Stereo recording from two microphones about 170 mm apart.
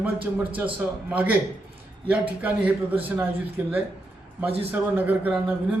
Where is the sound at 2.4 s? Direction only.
10° right (ahead or behind).